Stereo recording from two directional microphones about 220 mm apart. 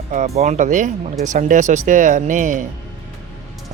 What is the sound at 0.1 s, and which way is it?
Speech, 30° right (ahead or behind).